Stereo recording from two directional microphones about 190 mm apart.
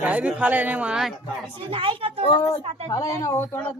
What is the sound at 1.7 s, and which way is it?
A woman's voice, 30° right (ahead or behind).